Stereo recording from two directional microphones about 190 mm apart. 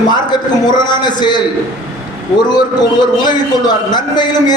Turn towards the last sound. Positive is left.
turn(degrees=20)  # may be behind; listen again after turning